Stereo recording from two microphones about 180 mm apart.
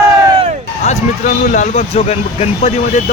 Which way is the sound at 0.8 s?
40° left (ahead or behind).